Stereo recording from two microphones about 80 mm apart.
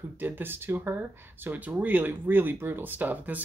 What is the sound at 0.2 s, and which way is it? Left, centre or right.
Speech, right.